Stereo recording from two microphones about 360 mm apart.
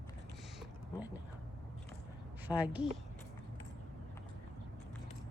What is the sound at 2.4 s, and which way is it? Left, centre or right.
Speech, centre.